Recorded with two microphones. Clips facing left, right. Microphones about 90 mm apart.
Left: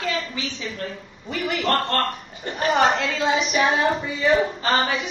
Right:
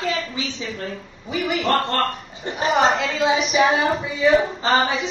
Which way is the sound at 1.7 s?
15° right (ahead or behind).